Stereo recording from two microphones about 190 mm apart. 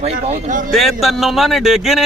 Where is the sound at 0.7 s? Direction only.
Centre (ahead or behind).